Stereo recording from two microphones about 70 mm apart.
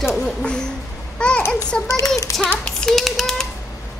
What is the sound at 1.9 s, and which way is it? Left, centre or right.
Speech, left.